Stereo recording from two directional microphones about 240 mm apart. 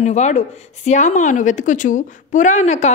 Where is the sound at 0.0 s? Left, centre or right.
Left.